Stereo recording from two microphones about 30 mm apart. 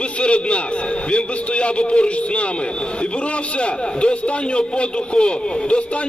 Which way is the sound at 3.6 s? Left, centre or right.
Left.